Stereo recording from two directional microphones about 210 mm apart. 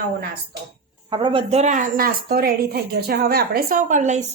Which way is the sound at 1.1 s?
25° right (ahead or behind).